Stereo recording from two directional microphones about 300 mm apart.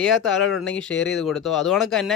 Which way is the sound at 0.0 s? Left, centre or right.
Centre.